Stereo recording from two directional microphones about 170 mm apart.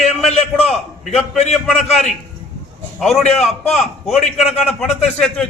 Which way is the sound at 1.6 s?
Centre (ahead or behind).